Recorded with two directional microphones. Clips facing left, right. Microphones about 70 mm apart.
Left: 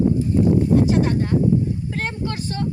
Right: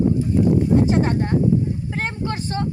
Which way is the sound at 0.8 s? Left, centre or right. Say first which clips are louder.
Even; right.